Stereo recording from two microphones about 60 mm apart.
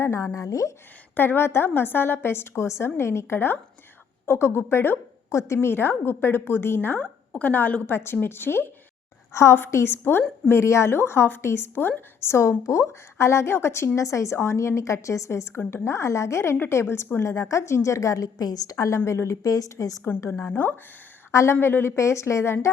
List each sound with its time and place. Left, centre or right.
0.0 s a woman's voice: left
1.1 s a woman's voice: left
5.3 s a woman's voice: left
5.5 s a woman's voice: left
7.0 s a woman's voice: left
9.3 s a woman's voice: left
9.9 s a woman's voice: left
10.5 s a woman's voice: left
17.2 s a woman's voice: left
19.0 s a woman's voice: left
19.4 s a woman's voice: left
20.4 s a woman's voice: left
21.3 s a woman's voice: left